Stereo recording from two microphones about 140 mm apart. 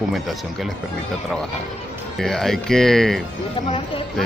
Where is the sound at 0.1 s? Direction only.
Centre (ahead or behind).